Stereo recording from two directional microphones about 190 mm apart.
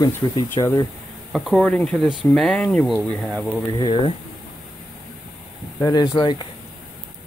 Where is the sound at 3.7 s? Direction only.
25° left (ahead or behind).